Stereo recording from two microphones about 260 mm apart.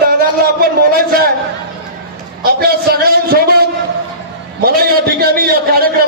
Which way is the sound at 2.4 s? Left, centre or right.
Right.